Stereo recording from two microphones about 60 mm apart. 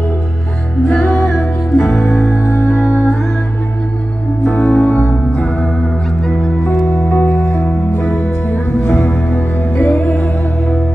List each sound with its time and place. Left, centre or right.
0.8 s music: centre
4.5 s music: centre
6.2 s music: centre
6.9 s music: left; by 8.4 s centre
8.5 s music: left